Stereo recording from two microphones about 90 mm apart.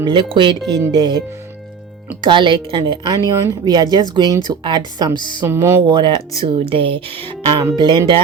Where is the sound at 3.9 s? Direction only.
50° right (ahead or behind).